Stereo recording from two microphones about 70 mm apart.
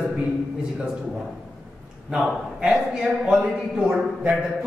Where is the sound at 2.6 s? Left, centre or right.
Centre.